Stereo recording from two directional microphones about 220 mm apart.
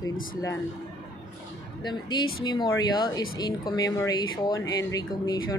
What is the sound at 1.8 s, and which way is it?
Speech, 20° left (ahead or behind).